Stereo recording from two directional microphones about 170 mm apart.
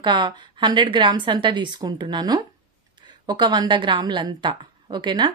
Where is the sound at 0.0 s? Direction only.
25° right (ahead or behind).